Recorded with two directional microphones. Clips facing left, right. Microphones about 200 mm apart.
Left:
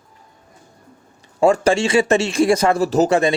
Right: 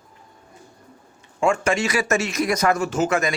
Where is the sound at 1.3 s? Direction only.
35° left (ahead or behind).